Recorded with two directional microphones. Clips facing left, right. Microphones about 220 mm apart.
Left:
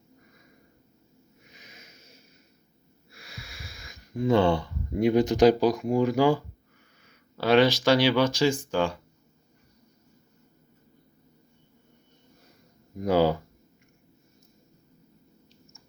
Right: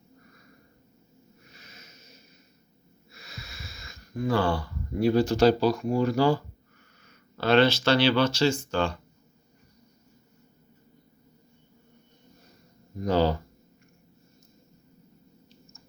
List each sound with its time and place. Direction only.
1.5 s a sound: 15° left (ahead or behind)
3.1 s speech: 10° left (ahead or behind)
13.0 s speech: 10° left (ahead or behind)